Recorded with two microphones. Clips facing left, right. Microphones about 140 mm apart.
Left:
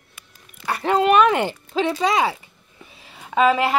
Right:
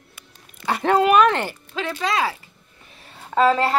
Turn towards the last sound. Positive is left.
turn(degrees=10)  # may be behind; listen again after turning